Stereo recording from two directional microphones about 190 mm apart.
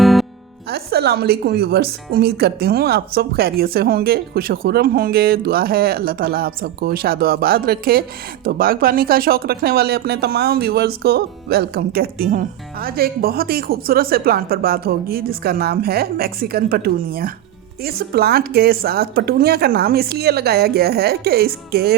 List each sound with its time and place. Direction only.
0.0 s music: centre (ahead or behind)
0.7 s speech: 55° right (ahead or behind)